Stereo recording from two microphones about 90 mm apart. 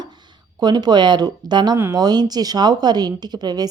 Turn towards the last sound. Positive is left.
turn(degrees=-50)  # may be behind; listen again after turning